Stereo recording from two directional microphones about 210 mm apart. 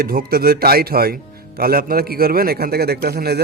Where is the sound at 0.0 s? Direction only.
45° right (ahead or behind).